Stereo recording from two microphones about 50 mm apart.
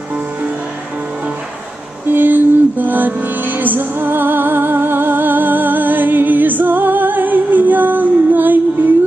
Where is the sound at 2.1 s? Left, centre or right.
Right.